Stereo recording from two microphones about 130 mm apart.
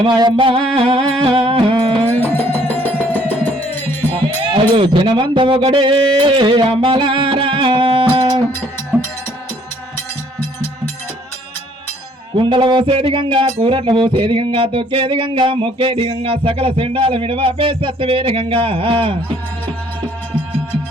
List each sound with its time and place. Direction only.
0.0 s music: 35° right (ahead or behind)
2.0 s music: 15° left (ahead or behind)
4.5 s speech: 40° right (ahead or behind)
12.3 s music: 40° right (ahead or behind)